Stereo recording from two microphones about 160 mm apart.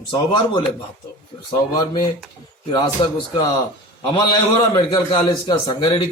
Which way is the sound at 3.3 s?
30° left (ahead or behind).